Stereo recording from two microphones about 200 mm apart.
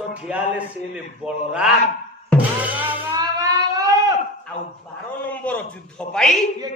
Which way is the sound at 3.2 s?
20° right (ahead or behind).